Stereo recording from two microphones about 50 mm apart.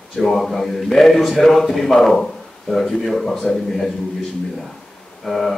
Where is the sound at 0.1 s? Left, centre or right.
Centre.